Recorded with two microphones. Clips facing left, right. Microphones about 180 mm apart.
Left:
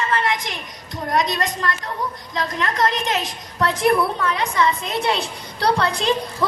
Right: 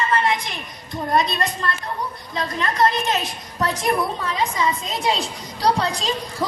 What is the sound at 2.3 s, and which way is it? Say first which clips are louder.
Speech: even; 75° left (ahead or behind).